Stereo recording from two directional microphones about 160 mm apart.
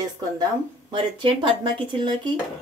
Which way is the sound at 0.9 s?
30° right (ahead or behind).